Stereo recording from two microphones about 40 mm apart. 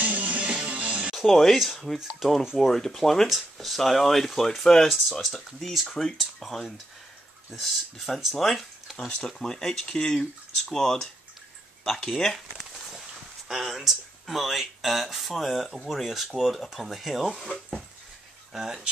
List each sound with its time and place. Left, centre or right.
0.0 s music: right
0.4 s music: right
1.1 s speech: centre
5.2 s speech: centre
9.2 s speech: centre